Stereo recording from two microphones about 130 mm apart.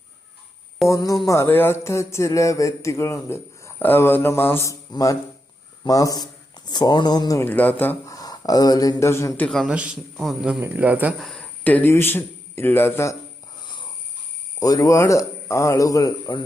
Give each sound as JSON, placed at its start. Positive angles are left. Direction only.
{"t": 0.9, "sound": "speech", "side_deg": 25}
{"t": 7.4, "sound": "speech", "side_deg": 15}
{"t": 8.1, "sound": "speech", "side_deg": 30}
{"t": 9.5, "sound": "a man's voice", "side_deg": 5}
{"t": 10.6, "sound": "speech", "side_deg": -15}
{"t": 11.2, "sound": "speech", "side_deg": 5}
{"t": 14.6, "sound": "speech", "side_deg": 25}